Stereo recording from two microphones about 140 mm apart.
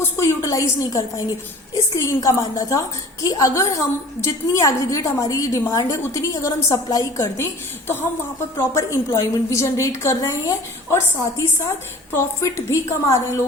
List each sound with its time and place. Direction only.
0.0 s a woman's voice: 20° left (ahead or behind)
8.5 s a woman's voice: 20° left (ahead or behind)